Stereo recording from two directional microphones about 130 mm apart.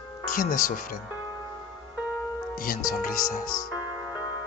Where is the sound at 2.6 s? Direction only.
90° left.